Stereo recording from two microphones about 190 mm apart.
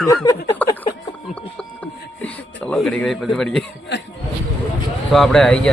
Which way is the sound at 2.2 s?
5° left (ahead or behind).